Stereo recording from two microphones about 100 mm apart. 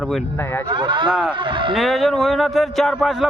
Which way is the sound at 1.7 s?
Centre (ahead or behind).